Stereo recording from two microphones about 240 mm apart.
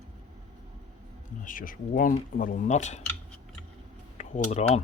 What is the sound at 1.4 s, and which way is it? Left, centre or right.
Speech, left.